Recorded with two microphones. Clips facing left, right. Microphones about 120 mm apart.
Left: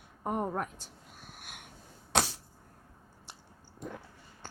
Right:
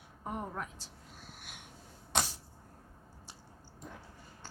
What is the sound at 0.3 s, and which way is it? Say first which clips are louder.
Speech: left 7 dB; 55° left (ahead or behind).